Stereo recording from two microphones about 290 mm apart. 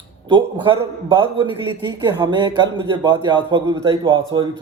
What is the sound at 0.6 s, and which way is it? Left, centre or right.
A man's voice, centre.